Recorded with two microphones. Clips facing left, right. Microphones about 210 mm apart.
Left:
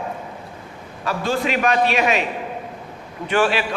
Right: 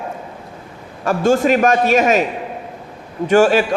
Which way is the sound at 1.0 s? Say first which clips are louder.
Right 8 dB; 45° right (ahead or behind).